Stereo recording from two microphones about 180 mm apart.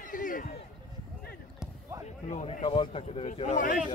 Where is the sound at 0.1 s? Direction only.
50° left (ahead or behind).